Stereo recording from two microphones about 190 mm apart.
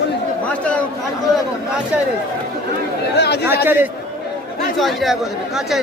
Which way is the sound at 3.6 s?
10° right (ahead or behind).